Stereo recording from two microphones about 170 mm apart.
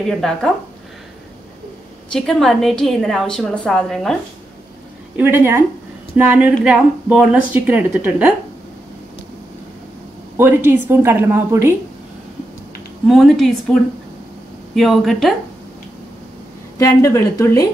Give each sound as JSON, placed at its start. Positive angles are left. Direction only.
{"t": 0.1, "sound": "a woman's voice", "side_deg": 0}
{"t": 2.1, "sound": "a woman's voice", "side_deg": 0}
{"t": 5.1, "sound": "a woman's voice", "side_deg": -10}
{"t": 10.3, "sound": "a woman's voice", "side_deg": -15}
{"t": 13.0, "sound": "a woman's voice", "side_deg": 0}
{"t": 16.7, "sound": "a woman's voice", "side_deg": 20}